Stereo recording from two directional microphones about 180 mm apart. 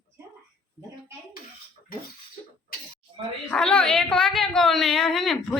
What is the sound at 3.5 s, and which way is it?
Speech, 5° left (ahead or behind).